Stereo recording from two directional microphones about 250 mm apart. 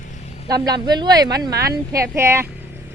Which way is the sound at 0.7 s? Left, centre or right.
Centre.